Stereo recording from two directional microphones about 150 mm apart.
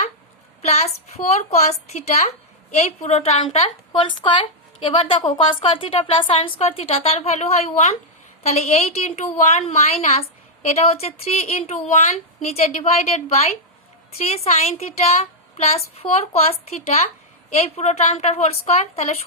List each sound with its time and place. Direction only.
0.6 s a woman's voice: 45° left (ahead or behind)